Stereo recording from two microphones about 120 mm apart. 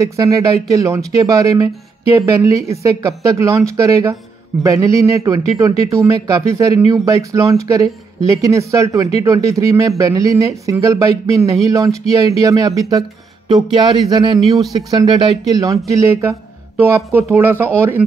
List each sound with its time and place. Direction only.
0.0 s speech: 25° right (ahead or behind)
15.6 s speech: 30° right (ahead or behind)